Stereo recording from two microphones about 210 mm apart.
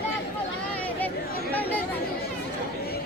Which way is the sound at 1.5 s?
10° left (ahead or behind).